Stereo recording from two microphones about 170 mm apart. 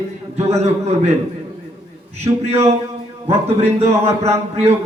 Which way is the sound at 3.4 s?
40° right (ahead or behind).